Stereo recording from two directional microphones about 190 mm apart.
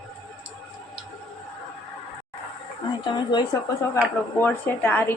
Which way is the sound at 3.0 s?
25° left (ahead or behind).